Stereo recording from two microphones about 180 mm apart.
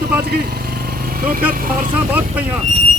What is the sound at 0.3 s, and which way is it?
Speech, 60° right (ahead or behind).